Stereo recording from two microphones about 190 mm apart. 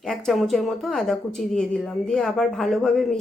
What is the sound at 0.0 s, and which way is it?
Speech, centre (ahead or behind).